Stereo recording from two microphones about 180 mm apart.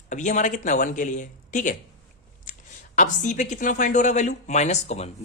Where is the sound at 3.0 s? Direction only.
45° left (ahead or behind).